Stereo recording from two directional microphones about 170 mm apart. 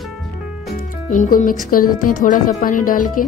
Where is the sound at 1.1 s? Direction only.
50° left (ahead or behind).